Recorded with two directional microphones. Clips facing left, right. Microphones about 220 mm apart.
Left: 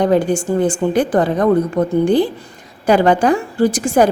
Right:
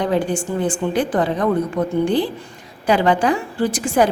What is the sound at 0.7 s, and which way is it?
A woman's voice, 45° left (ahead or behind).